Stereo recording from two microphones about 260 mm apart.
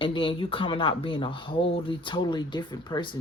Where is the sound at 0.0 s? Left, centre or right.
Centre.